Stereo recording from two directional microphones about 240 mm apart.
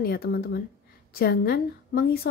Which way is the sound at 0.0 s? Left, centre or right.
Left.